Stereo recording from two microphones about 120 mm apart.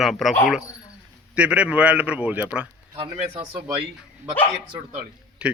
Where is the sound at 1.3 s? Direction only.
10° right (ahead or behind).